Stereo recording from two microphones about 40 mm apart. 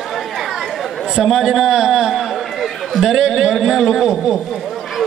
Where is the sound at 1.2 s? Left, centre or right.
Centre.